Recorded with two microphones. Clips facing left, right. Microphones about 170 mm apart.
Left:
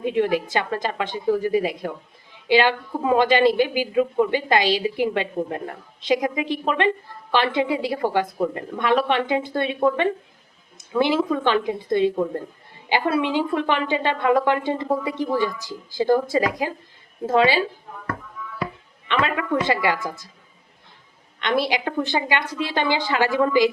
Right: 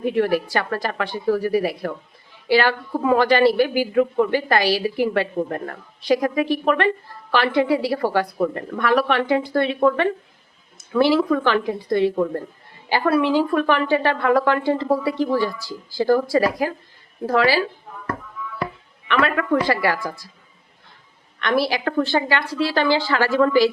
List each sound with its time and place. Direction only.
0.0 s speech: 20° left (ahead or behind)
19.0 s speech: 20° left (ahead or behind)
21.3 s a woman's voice: 20° left (ahead or behind)